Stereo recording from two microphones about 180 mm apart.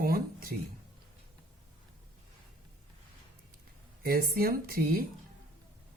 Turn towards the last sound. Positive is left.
turn(degrees=-55)  # may be behind; listen again after turning